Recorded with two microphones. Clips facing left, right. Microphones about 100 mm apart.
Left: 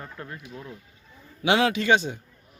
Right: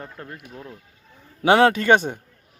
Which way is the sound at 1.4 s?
40° right (ahead or behind).